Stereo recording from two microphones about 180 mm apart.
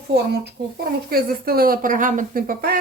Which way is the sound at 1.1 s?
55° right (ahead or behind).